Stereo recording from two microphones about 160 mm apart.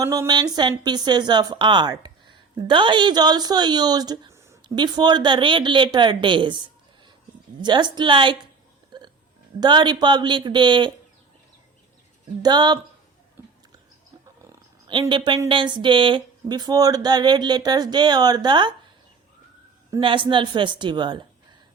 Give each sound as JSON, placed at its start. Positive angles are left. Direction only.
{"t": 0.0, "sound": "a woman's voice", "side_deg": -20}
{"t": 7.6, "sound": "a woman's voice", "side_deg": -25}
{"t": 8.9, "sound": "music", "side_deg": -25}
{"t": 9.6, "sound": "a woman's voice", "side_deg": -30}
{"t": 12.4, "sound": "a woman's voice", "side_deg": -25}
{"t": 15.1, "sound": "a woman's voice", "side_deg": -30}
{"t": 20.0, "sound": "a woman's voice", "side_deg": -30}